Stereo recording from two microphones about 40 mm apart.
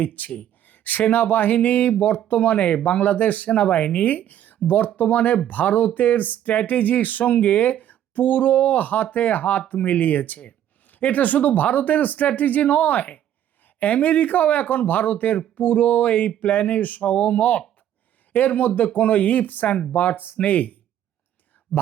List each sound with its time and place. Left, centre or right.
0.0 s speech: left
3.7 s speech: left
4.0 s speech: left